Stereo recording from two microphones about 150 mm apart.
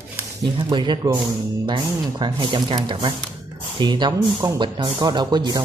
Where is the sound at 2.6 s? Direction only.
45° right (ahead or behind).